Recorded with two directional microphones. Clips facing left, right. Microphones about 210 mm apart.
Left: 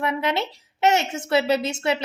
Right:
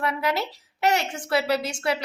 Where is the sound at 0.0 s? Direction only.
20° left (ahead or behind).